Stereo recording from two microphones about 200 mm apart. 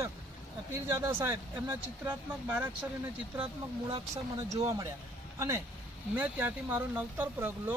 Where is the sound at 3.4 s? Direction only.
30° right (ahead or behind).